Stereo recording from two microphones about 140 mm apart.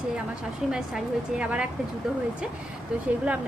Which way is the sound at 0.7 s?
5° right (ahead or behind).